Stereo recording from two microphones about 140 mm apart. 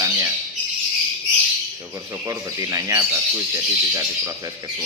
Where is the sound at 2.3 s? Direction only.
25° right (ahead or behind).